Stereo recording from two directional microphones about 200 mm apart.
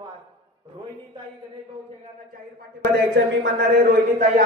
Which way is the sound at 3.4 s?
55° right (ahead or behind).